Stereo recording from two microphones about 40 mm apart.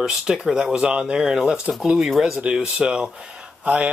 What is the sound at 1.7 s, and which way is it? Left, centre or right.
Speech, centre.